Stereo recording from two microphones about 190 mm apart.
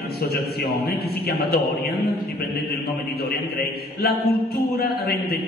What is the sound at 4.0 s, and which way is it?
A man's voice, 55° left (ahead or behind).